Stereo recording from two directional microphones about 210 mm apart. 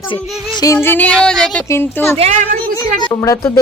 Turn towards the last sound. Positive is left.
turn(degrees=15)  # may be behind; listen again after turning